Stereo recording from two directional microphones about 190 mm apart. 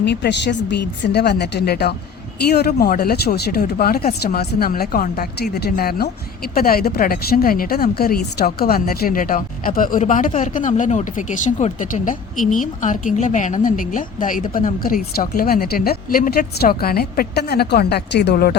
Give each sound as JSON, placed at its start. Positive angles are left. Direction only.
{"t": 0.0, "sound": "a woman's voice", "side_deg": 65}